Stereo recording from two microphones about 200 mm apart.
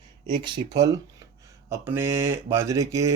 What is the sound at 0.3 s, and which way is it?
Speech, 25° right (ahead or behind).